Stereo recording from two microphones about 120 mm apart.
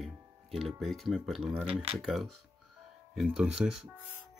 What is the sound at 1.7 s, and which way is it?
Speech, 55° right (ahead or behind).